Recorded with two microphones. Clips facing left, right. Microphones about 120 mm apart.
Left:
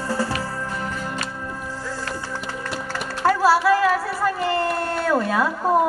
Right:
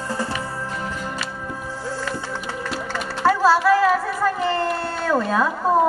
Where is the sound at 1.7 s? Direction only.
15° right (ahead or behind).